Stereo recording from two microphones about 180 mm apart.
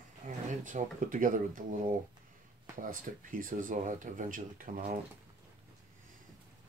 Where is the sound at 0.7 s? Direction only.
45° right (ahead or behind).